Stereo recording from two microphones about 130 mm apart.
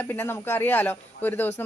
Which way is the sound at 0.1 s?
15° left (ahead or behind).